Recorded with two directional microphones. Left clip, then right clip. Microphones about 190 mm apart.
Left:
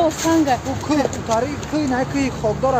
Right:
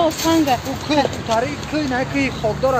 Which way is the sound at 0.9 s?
30° left (ahead or behind).